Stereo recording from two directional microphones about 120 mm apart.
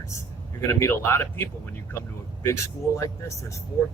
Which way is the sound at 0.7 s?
20° left (ahead or behind).